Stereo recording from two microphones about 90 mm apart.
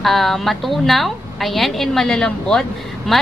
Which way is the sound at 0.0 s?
Centre (ahead or behind).